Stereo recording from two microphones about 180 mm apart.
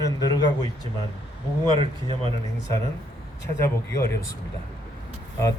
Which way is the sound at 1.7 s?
30° right (ahead or behind).